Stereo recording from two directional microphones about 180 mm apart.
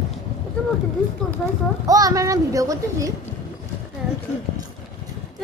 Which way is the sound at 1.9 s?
20° right (ahead or behind).